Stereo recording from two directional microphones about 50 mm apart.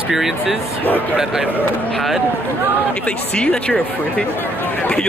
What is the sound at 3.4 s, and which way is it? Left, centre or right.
Speech, left.